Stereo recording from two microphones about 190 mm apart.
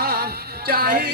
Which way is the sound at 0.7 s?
50° right (ahead or behind).